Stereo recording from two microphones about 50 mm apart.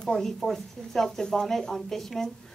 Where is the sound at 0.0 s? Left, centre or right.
Centre.